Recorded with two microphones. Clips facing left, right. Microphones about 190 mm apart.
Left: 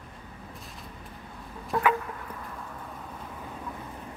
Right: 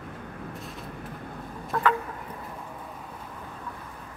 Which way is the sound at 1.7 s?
20° left (ahead or behind).